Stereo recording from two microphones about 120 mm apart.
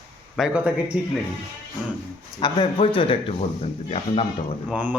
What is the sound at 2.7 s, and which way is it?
Speech, 50° left (ahead or behind).